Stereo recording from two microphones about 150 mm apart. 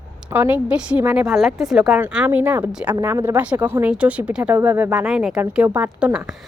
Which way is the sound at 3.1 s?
25° right (ahead or behind).